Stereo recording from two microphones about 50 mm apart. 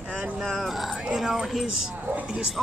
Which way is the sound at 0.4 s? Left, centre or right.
Centre.